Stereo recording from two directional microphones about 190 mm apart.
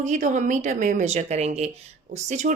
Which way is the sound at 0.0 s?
40° right (ahead or behind).